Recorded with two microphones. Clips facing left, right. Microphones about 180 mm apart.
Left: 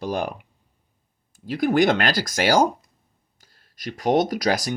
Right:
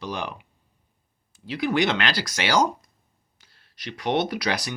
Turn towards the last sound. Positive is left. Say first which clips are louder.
# left 5 dB
turn(degrees=45)  # may be behind; listen again after turning